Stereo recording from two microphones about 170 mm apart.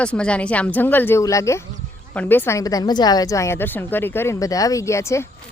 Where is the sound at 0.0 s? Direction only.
5° left (ahead or behind).